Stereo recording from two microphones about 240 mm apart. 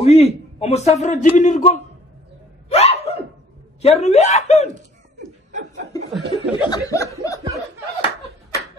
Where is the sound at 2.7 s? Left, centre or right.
Left.